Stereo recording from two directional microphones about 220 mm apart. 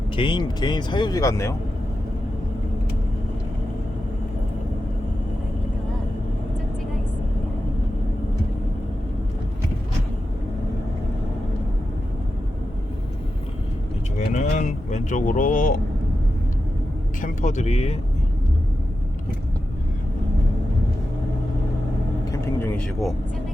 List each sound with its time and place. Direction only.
0.2 s speech: 20° left (ahead or behind)
14.2 s vehicle: 35° left (ahead or behind)
17.2 s speech: 35° left (ahead or behind)
22.3 s vehicle: 10° left (ahead or behind)